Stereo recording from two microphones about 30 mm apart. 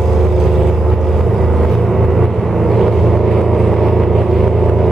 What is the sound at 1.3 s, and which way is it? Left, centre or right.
Vehicle, centre.